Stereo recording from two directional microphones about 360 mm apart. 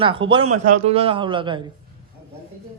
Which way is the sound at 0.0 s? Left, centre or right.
Centre.